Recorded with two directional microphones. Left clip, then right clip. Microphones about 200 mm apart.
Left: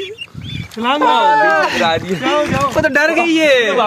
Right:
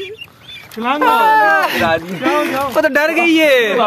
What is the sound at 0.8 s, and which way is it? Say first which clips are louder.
Speech: even; 45° left (ahead or behind).